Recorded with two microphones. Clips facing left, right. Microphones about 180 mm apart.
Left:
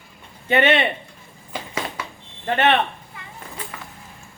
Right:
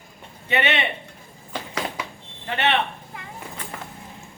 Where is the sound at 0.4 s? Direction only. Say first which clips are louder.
Left 6 dB; 50° left (ahead or behind).